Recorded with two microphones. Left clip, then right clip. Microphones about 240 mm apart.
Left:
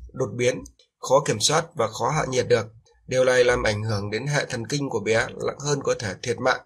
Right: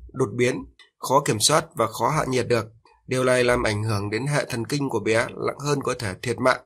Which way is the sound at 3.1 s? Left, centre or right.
Right.